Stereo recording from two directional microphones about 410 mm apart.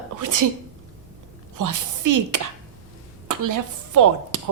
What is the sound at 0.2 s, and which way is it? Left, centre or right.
Sneeze, right.